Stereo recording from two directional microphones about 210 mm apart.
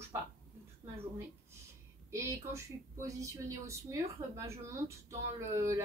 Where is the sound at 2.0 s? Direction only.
15° right (ahead or behind).